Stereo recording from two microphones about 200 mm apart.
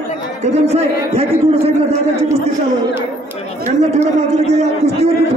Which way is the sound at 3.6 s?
35° right (ahead or behind).